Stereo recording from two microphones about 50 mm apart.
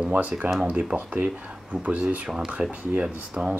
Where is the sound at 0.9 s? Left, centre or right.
Right.